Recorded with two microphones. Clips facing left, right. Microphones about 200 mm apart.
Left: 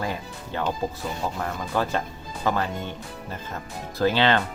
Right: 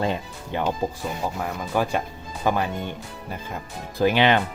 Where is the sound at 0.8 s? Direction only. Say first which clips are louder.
Right 2 dB; 15° right (ahead or behind).